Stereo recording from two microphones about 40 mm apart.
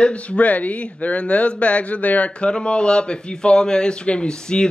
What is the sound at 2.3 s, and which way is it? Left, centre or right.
Speech, left.